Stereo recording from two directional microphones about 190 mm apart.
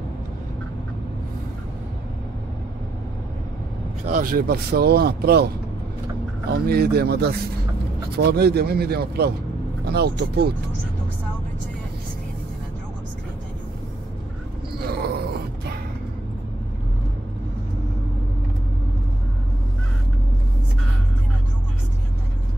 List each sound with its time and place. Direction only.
4.0 s speech: 45° right (ahead or behind)
6.5 s speech: 55° right (ahead or behind)
14.8 s groan: 55° right (ahead or behind)